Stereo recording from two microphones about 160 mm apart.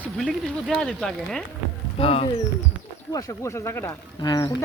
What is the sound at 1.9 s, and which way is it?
Speech, 35° left (ahead or behind).